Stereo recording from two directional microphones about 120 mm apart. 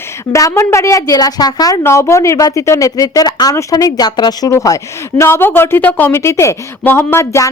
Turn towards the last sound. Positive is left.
turn(degrees=20)  # may be behind; listen again after turning